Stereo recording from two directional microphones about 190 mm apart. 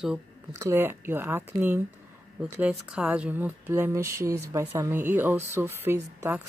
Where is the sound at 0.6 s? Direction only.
15° right (ahead or behind).